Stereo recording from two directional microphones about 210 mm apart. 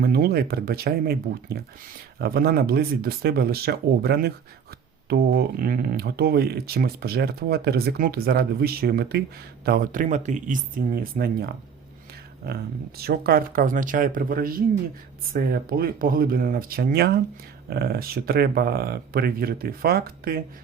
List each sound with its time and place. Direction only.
0.0 s speech: 45° right (ahead or behind)
13.0 s speech: 45° right (ahead or behind)